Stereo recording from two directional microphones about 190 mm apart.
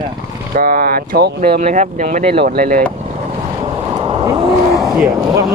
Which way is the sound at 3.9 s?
20° right (ahead or behind).